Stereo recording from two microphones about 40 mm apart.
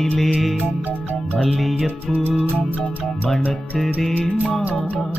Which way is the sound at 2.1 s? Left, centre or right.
Right.